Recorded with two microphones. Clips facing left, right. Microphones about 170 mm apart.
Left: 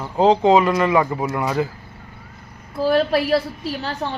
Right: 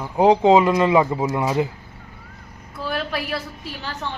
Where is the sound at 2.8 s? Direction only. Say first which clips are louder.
Left 9 dB; 35° left (ahead or behind).